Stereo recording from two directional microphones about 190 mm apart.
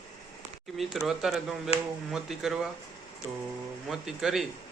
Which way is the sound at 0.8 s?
Centre (ahead or behind).